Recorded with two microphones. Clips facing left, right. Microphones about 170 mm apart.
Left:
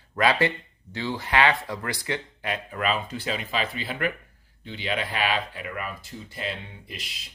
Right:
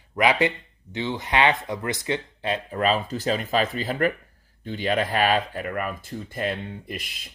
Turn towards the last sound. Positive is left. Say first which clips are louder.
# right 7 dB
turn(degrees=-50)  # may be behind; listen again after turning